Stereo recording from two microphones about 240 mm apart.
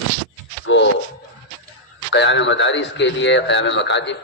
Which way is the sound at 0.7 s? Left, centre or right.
Left.